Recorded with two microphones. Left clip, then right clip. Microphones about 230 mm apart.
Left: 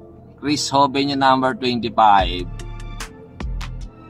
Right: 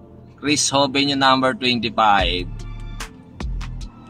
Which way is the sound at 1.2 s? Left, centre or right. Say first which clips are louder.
Left 1 dB; centre.